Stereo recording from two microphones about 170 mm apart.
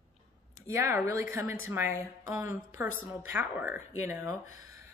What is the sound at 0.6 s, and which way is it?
A woman's voice, 15° right (ahead or behind).